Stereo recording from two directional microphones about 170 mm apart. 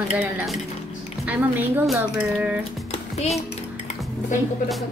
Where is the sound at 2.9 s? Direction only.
40° left (ahead or behind).